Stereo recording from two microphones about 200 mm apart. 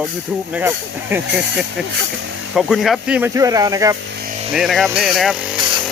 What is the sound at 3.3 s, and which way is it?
Speech, 15° right (ahead or behind).